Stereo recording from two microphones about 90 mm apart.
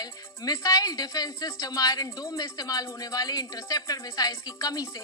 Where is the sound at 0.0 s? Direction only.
45° left (ahead or behind).